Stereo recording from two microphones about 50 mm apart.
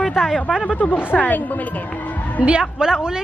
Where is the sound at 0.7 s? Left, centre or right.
Left.